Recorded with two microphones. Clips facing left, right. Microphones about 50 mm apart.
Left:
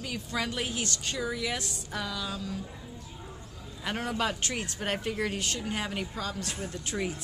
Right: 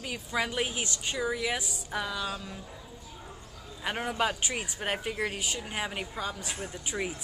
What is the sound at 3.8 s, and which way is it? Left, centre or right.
Speech, centre.